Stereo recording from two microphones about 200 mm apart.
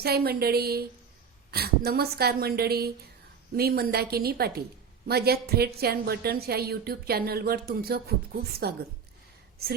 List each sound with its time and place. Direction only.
0.0 s a woman's voice: 50° right (ahead or behind)